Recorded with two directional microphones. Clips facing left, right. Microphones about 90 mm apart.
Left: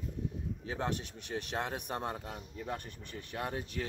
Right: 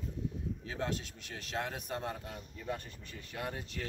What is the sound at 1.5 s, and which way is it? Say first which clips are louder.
Speech: right 1 dB; 25° left (ahead or behind).